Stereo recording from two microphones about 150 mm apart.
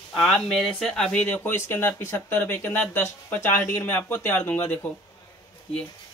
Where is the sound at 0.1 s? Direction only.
Centre (ahead or behind).